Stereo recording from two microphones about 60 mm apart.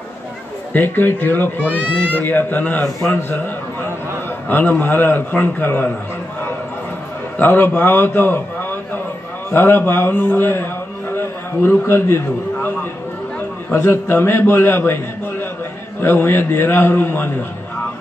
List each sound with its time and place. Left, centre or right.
0.7 s a man's voice: left
7.3 s a man's voice: left
10.3 s a sound: left
13.7 s a man's voice: left
16.0 s a man's voice: left